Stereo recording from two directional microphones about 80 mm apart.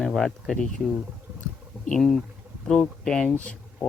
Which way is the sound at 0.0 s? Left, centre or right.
Centre.